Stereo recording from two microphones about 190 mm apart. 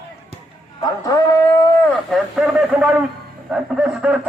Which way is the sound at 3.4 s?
Centre (ahead or behind).